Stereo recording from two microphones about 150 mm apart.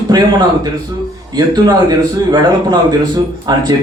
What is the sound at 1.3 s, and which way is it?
A man's voice, 25° right (ahead or behind).